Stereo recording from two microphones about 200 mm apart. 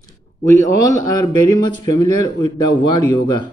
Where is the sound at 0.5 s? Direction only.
20° left (ahead or behind).